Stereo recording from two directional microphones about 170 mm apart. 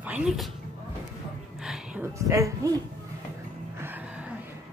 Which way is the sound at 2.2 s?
20° right (ahead or behind).